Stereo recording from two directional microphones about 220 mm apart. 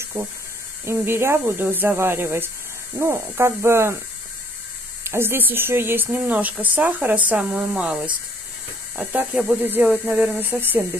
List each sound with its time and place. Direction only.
0.2 s speech: 15° right (ahead or behind)
5.0 s speech: 10° right (ahead or behind)